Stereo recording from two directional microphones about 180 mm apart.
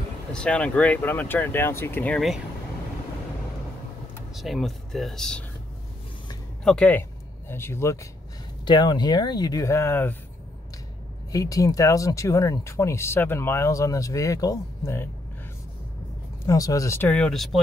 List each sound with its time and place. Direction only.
0.3 s speech: 5° left (ahead or behind)
4.3 s speech: centre (ahead or behind)
6.6 s speech: 5° left (ahead or behind)
11.3 s speech: 20° left (ahead or behind)
16.4 s speech: 20° left (ahead or behind); by 17.6 s centre (ahead or behind)